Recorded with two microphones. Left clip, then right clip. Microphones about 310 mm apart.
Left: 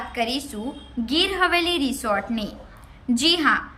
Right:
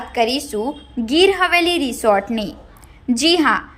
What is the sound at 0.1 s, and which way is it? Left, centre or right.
A woman's voice, centre.